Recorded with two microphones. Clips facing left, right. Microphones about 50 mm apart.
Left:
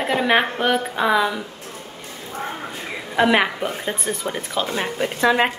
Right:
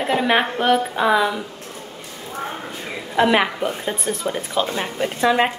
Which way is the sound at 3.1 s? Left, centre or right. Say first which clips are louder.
Even; centre.